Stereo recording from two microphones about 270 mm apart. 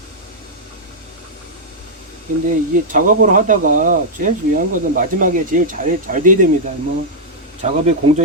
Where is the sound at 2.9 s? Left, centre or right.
Right.